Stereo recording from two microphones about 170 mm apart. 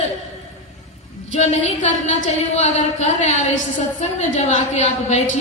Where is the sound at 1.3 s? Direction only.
40° left (ahead or behind).